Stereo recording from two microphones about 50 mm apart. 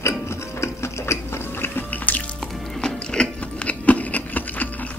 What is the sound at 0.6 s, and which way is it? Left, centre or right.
Music, left.